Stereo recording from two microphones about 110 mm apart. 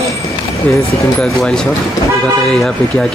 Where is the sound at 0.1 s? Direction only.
30° left (ahead or behind).